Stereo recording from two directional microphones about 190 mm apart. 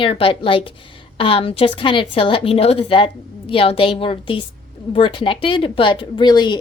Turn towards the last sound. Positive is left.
turn(degrees=20)  # may be behind; listen again after turning